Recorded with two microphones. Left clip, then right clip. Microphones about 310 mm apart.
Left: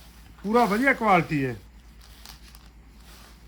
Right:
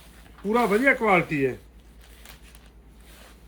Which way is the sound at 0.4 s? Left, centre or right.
Left.